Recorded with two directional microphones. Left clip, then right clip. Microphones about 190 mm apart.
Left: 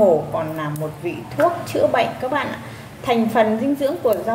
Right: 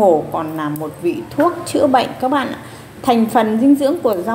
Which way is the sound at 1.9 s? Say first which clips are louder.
Right 4 dB; 30° right (ahead or behind).